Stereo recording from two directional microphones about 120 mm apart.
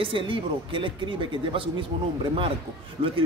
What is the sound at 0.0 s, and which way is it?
A man's voice, 45° right (ahead or behind).